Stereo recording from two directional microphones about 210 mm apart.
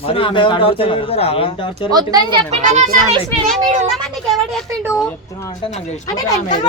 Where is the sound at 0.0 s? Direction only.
25° left (ahead or behind).